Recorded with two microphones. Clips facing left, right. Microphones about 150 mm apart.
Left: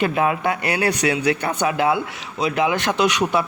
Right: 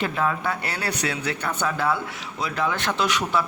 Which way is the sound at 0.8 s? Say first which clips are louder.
Left 7 dB; 90° left.